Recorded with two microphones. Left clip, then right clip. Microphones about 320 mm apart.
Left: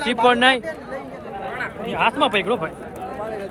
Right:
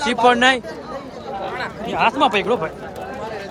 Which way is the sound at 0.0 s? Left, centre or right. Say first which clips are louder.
Right 2 dB; centre.